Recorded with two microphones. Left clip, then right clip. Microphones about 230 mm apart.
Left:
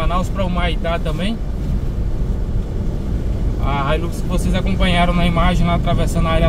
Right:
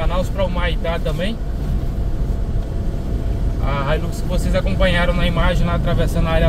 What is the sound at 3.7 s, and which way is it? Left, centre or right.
Speech, centre.